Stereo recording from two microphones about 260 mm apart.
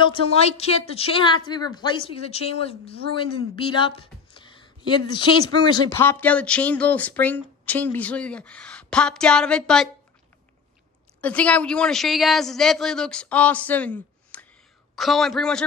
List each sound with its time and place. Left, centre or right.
0.0 s a woman's voice: left; by 9.8 s centre
11.1 s speech: centre